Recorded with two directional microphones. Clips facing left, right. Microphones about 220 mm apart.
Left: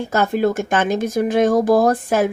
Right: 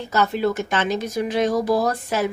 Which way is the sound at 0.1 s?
50° left (ahead or behind).